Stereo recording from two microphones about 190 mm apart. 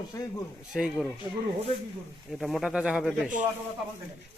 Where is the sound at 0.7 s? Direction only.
5° right (ahead or behind).